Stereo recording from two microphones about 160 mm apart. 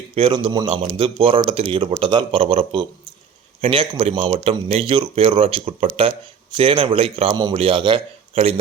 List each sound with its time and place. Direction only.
0.1 s speech: 35° right (ahead or behind)